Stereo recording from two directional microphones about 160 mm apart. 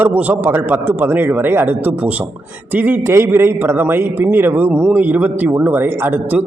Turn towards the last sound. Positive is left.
turn(degrees=-10)  # may be behind; listen again after turning